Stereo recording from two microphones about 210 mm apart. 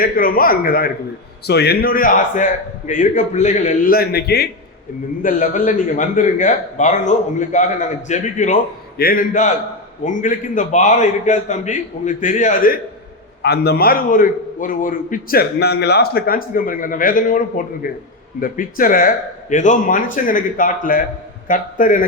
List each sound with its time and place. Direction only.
0.0 s a man's voice: 45° left (ahead or behind)
5.2 s a man's voice: 35° left (ahead or behind)
13.4 s a man's voice: 50° left (ahead or behind)